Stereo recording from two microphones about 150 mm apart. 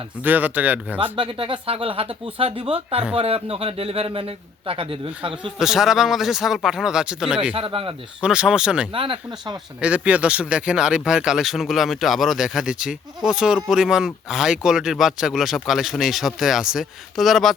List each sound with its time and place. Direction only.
0.2 s speech: 10° right (ahead or behind)
0.9 s a man's voice: 35° right (ahead or behind)
5.5 s speech: 5° right (ahead or behind)
7.5 s a man's voice: 40° right (ahead or behind)
8.2 s speech: 5° right (ahead or behind)
8.9 s a man's voice: 35° right (ahead or behind)
9.8 s speech: 10° right (ahead or behind)